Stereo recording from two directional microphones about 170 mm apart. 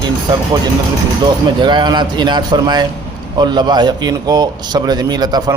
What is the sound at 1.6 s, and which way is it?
A man's voice, 25° right (ahead or behind).